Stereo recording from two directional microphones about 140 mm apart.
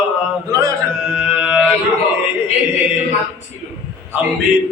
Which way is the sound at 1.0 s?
5° right (ahead or behind).